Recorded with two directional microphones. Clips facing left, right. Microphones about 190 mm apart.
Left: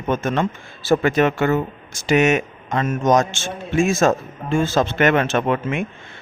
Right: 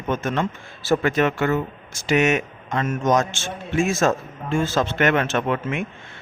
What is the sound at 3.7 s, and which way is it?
Speech, 30° left (ahead or behind).